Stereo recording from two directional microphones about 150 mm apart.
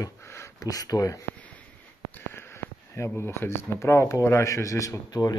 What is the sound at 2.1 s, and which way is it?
Speech, 15° left (ahead or behind).